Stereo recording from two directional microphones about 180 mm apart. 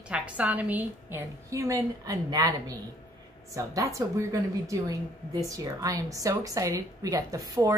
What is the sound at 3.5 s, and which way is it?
A woman's voice, 15° right (ahead or behind).